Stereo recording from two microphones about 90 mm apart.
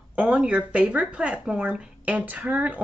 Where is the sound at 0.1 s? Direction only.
15° right (ahead or behind).